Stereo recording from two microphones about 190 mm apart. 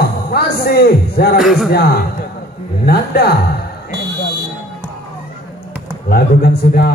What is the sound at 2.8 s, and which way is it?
Speech, 55° left (ahead or behind).